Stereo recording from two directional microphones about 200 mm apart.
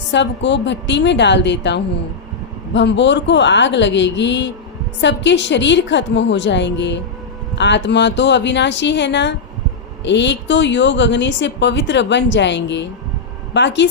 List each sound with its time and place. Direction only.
0.1 s a woman's voice: 60° left (ahead or behind)